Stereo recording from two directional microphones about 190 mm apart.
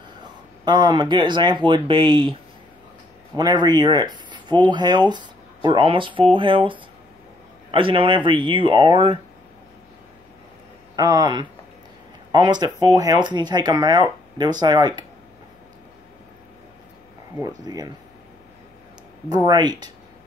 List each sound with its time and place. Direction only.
0.7 s speech: 25° right (ahead or behind)
3.3 s speech: 25° right (ahead or behind)
11.0 s speech: 20° right (ahead or behind)
17.6 s speech: 20° right (ahead or behind)
19.2 s speech: 20° right (ahead or behind)